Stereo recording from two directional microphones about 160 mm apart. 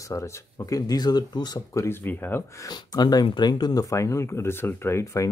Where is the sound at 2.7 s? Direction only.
25° left (ahead or behind).